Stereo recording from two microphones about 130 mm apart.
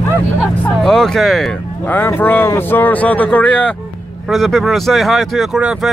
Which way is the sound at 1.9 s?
15° left (ahead or behind).